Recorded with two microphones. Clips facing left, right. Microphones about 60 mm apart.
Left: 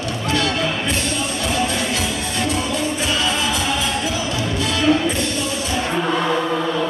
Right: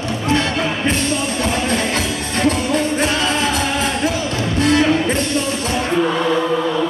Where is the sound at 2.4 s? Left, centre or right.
Right.